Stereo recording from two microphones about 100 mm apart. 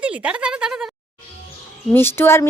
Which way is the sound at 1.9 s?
20° left (ahead or behind).